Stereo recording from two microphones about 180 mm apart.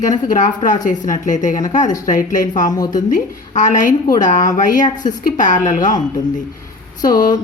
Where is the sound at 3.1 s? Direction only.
45° left (ahead or behind).